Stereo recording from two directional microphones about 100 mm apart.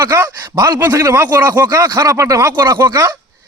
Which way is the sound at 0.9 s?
30° right (ahead or behind).